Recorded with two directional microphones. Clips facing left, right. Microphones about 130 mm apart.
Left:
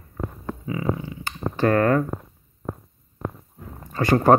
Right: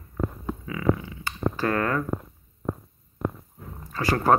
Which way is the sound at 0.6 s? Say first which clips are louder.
Right 1 dB; 30° left (ahead or behind).